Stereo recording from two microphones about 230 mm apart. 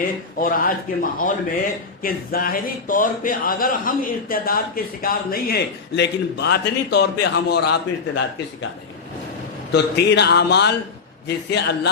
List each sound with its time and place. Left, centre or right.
0.3 s speech: left
9.7 s a man's voice: left